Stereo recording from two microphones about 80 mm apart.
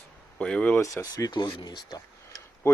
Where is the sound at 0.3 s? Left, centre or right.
Centre.